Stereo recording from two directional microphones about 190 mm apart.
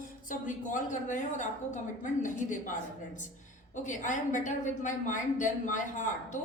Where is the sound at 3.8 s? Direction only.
40° left (ahead or behind).